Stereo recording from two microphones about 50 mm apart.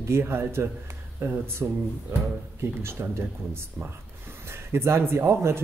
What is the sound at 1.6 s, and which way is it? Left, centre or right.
Speech, right.